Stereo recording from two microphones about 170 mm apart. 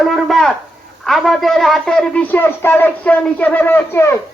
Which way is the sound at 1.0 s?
Centre (ahead or behind).